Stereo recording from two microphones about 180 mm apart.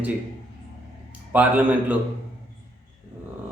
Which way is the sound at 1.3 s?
10° right (ahead or behind).